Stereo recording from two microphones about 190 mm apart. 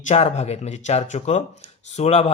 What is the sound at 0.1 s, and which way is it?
Speech, 35° left (ahead or behind).